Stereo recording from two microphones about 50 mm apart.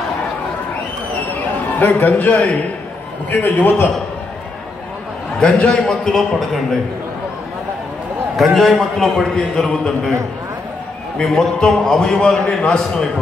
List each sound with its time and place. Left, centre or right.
1.8 s a man's voice: left
5.4 s a man's voice: left
6.1 s a man's voice: centre
8.4 s a man's voice: centre
11.3 s a man's voice: centre